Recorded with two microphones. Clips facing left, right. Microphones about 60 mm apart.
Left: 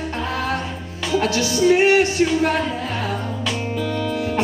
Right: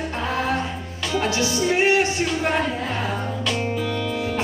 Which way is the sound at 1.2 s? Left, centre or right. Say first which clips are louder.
Left 3 dB; right.